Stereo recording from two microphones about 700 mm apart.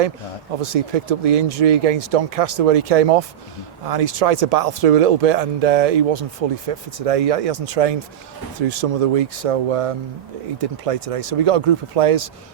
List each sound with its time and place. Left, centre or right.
0.6 s speech: right